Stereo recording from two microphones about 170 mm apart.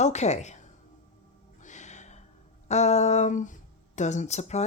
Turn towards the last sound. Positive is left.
turn(degrees=40)  # may be behind; listen again after turning